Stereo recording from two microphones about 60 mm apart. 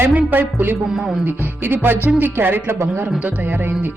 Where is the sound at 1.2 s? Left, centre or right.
Right.